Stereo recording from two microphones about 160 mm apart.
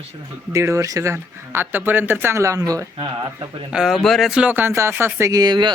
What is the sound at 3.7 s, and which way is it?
Speech, centre (ahead or behind).